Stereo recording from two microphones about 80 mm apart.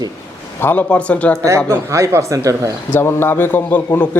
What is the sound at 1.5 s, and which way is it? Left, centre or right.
Speech, right.